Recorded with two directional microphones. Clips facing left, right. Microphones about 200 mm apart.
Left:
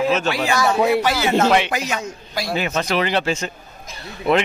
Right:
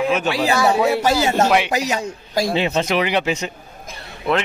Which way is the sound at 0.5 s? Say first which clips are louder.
Even; 35° right (ahead or behind).